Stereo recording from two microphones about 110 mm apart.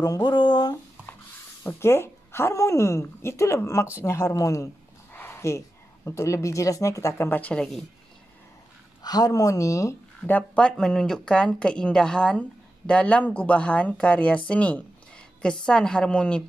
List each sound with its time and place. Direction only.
0.0 s speech: 40° left (ahead or behind)
1.6 s speech: 25° left (ahead or behind)
5.1 s dog: 20° left (ahead or behind)
6.0 s speech: 25° left (ahead or behind); by 7.8 s 5° left (ahead or behind)
9.0 s speech: 35° left (ahead or behind)
10.2 s speech: 15° left (ahead or behind)
14.5 s a sound: 10° left (ahead or behind)
15.6 s speech: 5° left (ahead or behind)